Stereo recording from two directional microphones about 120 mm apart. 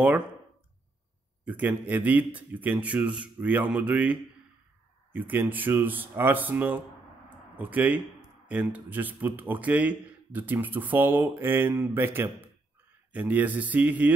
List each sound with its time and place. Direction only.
1.4 s speech: 15° right (ahead or behind)
7.2 s a sound: 15° right (ahead or behind)
8.6 s speech: 15° right (ahead or behind)